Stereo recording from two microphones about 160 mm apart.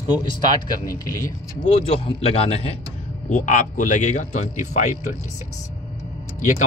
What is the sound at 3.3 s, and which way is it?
Speech, 50° left (ahead or behind).